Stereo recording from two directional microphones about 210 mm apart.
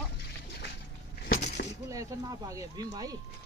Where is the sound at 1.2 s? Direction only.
45° left (ahead or behind).